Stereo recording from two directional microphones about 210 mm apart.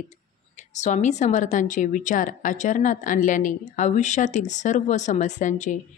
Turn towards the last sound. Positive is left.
turn(degrees=35)  # may be behind; listen again after turning